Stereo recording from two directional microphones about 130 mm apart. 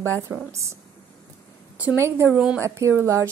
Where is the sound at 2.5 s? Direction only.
20° right (ahead or behind).